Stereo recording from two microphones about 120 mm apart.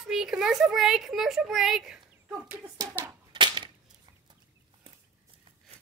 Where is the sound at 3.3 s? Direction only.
40° right (ahead or behind).